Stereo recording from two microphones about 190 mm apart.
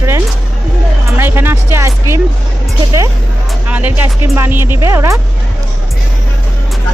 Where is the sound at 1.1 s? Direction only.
10° right (ahead or behind).